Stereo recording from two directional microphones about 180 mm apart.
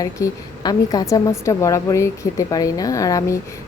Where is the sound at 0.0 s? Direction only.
20° left (ahead or behind).